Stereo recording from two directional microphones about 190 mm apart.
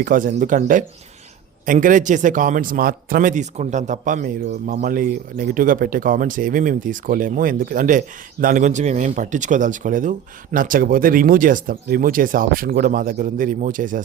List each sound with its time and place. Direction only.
0.0 s a man's voice: 45° right (ahead or behind)